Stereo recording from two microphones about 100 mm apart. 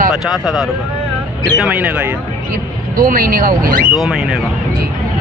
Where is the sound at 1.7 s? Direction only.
15° right (ahead or behind).